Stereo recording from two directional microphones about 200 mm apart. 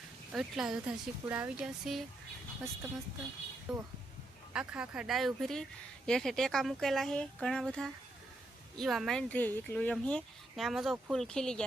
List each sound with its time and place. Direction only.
0.3 s speech: centre (ahead or behind)
3.7 s speech: centre (ahead or behind)